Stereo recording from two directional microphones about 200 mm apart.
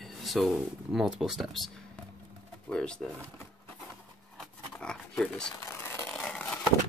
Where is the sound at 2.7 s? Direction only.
5° left (ahead or behind).